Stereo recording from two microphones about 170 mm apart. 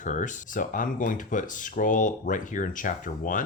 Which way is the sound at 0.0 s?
50° left (ahead or behind).